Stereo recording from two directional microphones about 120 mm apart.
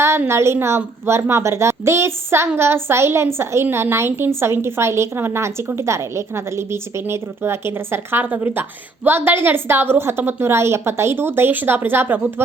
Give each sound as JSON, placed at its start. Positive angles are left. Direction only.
{"t": 0.0, "sound": "a woman's voice", "side_deg": -20}